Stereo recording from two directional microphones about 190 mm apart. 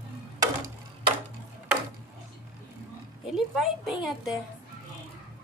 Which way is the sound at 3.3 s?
Centre (ahead or behind).